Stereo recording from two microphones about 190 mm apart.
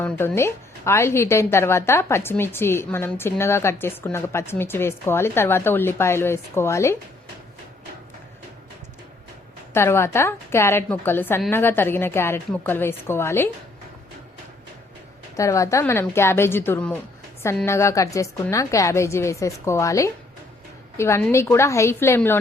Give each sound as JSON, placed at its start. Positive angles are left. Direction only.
{"t": 0.0, "sound": "a woman's voice", "side_deg": 10}
{"t": 9.7, "sound": "a woman's voice", "side_deg": 15}
{"t": 15.4, "sound": "a woman's voice", "side_deg": 15}